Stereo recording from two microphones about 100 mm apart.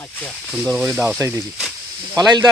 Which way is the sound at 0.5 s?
10° right (ahead or behind).